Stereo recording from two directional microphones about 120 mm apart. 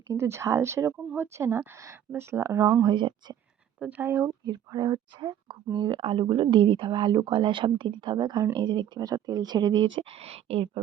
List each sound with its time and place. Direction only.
0.1 s speech: 20° right (ahead or behind); by 3.3 s 40° right (ahead or behind)
3.8 s speech: 10° right (ahead or behind)
4.4 s speech: 35° right (ahead or behind); by 10.7 s 60° right (ahead or behind)